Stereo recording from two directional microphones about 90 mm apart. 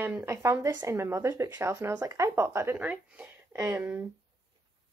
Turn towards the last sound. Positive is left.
turn(degrees=-25)  # may be behind; listen again after turning